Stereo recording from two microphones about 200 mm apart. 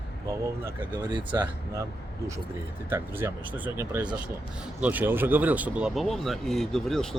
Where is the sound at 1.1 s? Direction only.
25° right (ahead or behind).